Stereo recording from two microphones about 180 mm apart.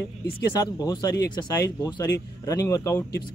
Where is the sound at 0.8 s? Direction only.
20° left (ahead or behind).